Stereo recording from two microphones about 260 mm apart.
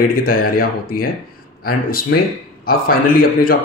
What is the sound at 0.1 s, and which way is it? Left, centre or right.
Speech, left.